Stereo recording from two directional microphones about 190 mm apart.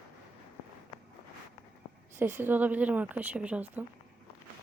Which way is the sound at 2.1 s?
10° right (ahead or behind).